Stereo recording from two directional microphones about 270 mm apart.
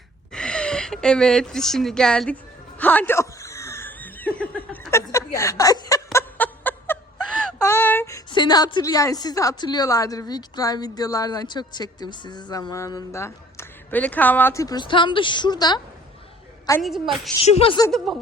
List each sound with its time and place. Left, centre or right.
0.3 s speech: centre
16.8 s a woman's voice: centre
17.4 s speech: centre